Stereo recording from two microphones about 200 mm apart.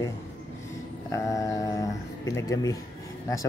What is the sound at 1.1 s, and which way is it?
Speech, 15° left (ahead or behind).